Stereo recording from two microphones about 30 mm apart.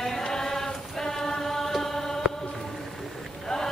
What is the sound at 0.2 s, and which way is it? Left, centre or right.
Choir, centre.